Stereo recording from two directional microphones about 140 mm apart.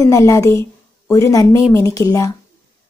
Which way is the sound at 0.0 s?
25° left (ahead or behind).